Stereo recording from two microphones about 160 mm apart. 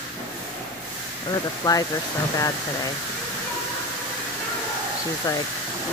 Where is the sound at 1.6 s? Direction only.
25° left (ahead or behind).